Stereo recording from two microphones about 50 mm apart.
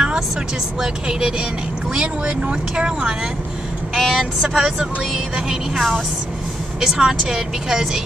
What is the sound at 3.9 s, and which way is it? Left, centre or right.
A woman's voice, centre.